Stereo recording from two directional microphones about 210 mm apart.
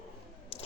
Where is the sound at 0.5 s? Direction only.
30° left (ahead or behind).